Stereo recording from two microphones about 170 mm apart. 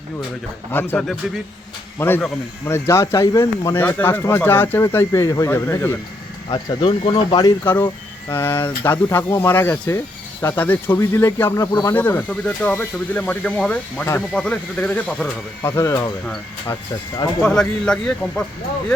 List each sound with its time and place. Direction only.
0.7 s speech: 10° left (ahead or behind)
6.5 s speech: 30° left (ahead or behind)
7.6 s speech: 10° left (ahead or behind)
15.7 s speech: 20° left (ahead or behind)
17.4 s a man's voice: 5° left (ahead or behind)